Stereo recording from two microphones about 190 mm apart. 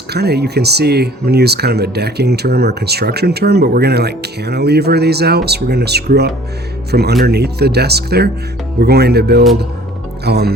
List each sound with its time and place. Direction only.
0.1 s speech: 60° right (ahead or behind)